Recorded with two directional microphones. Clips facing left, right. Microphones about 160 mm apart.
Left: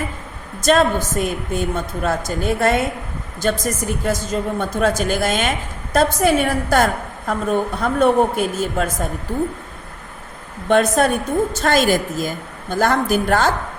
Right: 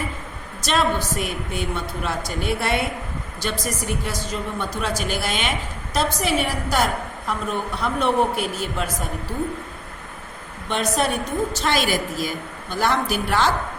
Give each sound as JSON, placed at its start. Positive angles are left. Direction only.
{"t": 0.6, "sound": "a woman's voice", "side_deg": 45}
{"t": 10.7, "sound": "a woman's voice", "side_deg": 50}